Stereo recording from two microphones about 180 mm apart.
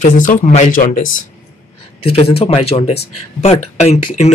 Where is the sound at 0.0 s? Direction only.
45° left (ahead or behind).